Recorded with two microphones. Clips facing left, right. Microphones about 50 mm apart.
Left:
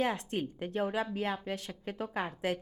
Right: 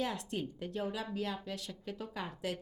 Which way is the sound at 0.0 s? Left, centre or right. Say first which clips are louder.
Left 5 dB; left.